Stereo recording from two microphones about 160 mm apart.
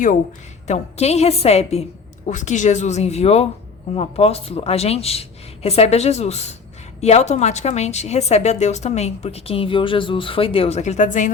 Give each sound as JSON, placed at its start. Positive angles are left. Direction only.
{"t": 0.7, "sound": "a woman's voice", "side_deg": 40}